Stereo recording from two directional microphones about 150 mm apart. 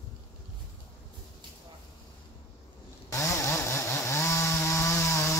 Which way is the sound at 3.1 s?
20° left (ahead or behind).